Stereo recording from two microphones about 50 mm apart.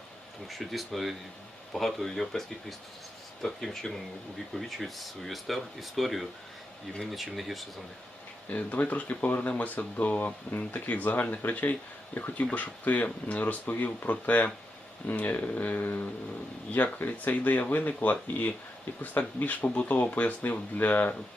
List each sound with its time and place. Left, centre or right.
0.4 s speech: centre
8.4 s speech: left